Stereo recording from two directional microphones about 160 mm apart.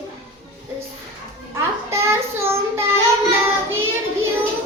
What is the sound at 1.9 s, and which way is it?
Child singing, 15° right (ahead or behind).